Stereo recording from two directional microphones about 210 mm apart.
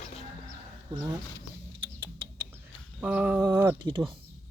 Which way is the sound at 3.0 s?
5° right (ahead or behind).